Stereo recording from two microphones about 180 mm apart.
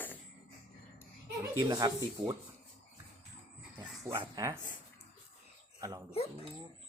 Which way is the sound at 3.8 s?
20° right (ahead or behind).